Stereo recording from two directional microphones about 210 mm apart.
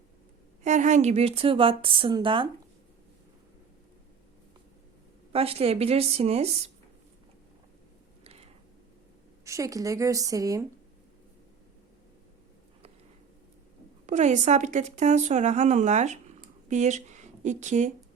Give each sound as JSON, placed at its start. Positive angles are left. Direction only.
{"t": 0.6, "sound": "a woman's voice", "side_deg": -35}
{"t": 5.3, "sound": "a woman's voice", "side_deg": -30}
{"t": 8.2, "sound": "a sound", "side_deg": -30}
{"t": 9.4, "sound": "a woman's voice", "side_deg": -15}
{"t": 14.1, "sound": "speech", "side_deg": -35}